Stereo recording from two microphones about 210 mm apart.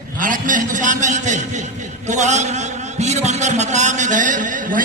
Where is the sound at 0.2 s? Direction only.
40° right (ahead or behind).